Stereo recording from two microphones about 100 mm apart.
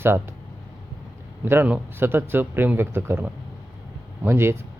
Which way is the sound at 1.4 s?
25° right (ahead or behind).